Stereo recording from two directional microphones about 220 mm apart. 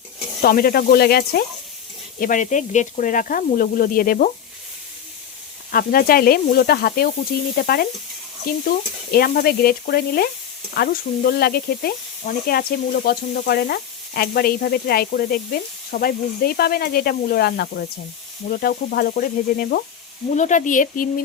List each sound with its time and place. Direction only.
0.4 s speech: 40° left (ahead or behind)
5.7 s speech: 40° left (ahead or behind)